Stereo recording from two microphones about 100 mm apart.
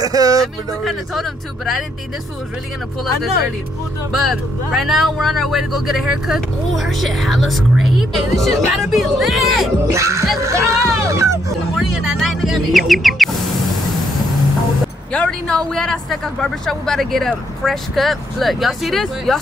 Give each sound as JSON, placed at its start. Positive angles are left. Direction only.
{"t": 0.0, "sound": "speech", "side_deg": -35}
{"t": 0.8, "sound": "speech", "side_deg": 0}
{"t": 4.1, "sound": "speech", "side_deg": 0}
{"t": 9.9, "sound": "speech", "side_deg": -30}
{"t": 10.4, "sound": "music", "side_deg": -30}
{"t": 11.7, "sound": "music", "side_deg": 0}
{"t": 15.1, "sound": "speech", "side_deg": 10}